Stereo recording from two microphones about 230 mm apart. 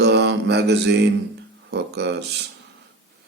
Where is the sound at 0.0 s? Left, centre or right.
Right.